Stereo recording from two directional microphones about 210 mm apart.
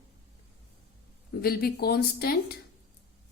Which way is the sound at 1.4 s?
45° left (ahead or behind).